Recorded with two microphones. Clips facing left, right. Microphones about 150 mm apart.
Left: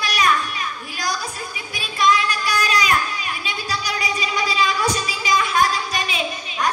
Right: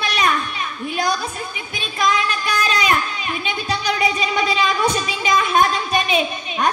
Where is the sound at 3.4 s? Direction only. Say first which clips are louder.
Right 6 dB; 25° right (ahead or behind).